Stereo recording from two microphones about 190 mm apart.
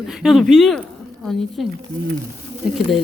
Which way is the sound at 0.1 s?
Centre (ahead or behind).